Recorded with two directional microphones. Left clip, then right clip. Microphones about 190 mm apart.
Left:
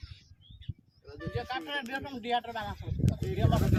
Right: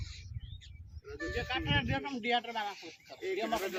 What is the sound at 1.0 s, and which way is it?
Speech, 30° left (ahead or behind).